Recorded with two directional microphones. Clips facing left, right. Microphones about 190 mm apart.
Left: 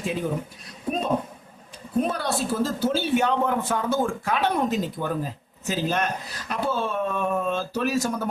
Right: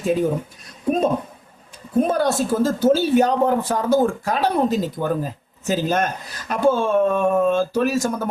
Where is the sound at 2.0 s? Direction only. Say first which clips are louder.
Right 6 dB; 45° right (ahead or behind).